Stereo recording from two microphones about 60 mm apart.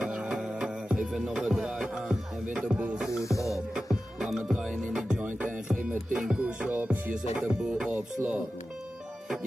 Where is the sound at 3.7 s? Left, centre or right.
Centre.